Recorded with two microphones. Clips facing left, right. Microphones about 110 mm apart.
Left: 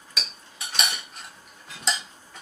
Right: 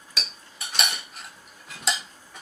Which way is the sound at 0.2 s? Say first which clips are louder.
Even; centre (ahead or behind).